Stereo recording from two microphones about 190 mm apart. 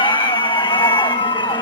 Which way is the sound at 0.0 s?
25° left (ahead or behind).